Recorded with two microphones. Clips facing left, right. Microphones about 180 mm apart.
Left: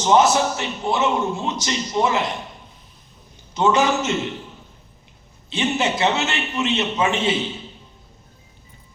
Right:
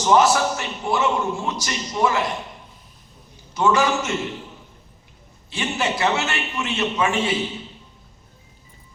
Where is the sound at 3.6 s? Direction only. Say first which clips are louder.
Left 1 dB; 20° left (ahead or behind).